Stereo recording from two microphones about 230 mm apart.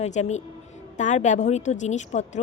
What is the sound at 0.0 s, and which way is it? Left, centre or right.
A woman's voice, left.